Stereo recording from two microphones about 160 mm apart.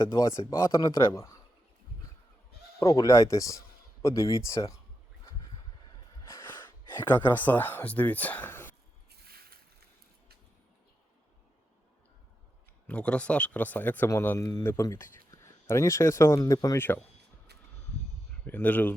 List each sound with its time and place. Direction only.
0.1 s speech: 20° left (ahead or behind)
2.7 s speech: 20° left (ahead or behind)
7.0 s speech: 10° left (ahead or behind)
9.0 s a sound: 75° right (ahead or behind)
12.9 s speech: 5° left (ahead or behind)
18.4 s speech: 10° left (ahead or behind)